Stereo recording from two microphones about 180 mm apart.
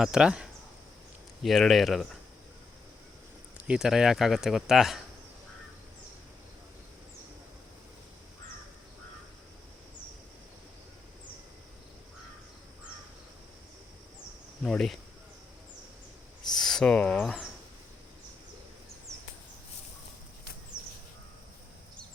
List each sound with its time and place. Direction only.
0.0 s speech: 5° right (ahead or behind)
3.7 s speech: 5° right (ahead or behind)
14.6 s speech: centre (ahead or behind)
16.5 s speech: centre (ahead or behind)